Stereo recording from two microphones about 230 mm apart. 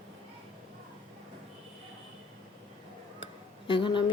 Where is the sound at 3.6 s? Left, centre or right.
Left.